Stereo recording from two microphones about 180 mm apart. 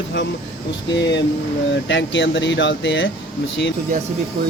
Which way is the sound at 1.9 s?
85° left.